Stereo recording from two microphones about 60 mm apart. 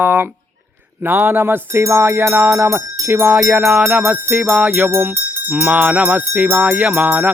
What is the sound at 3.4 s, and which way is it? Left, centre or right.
Speech, right.